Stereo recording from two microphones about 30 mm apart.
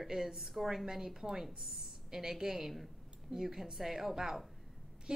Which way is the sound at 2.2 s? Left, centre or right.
Centre.